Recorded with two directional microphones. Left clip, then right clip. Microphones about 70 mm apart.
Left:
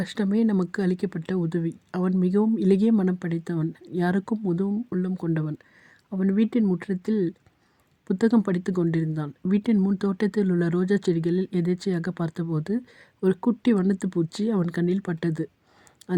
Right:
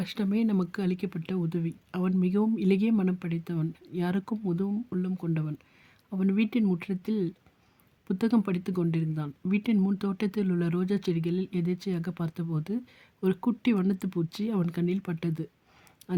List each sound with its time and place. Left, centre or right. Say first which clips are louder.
0.0 s speech: left 5 dB; left
6.3 s speech: left 5 dB; centre
9.7 s speech: left 4 dB; centre
10.0 s speech: left 6 dB; left